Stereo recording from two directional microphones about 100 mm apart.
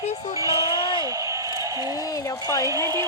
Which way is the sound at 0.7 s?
55° left (ahead or behind).